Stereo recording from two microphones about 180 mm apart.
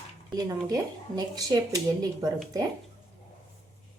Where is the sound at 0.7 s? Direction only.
20° right (ahead or behind).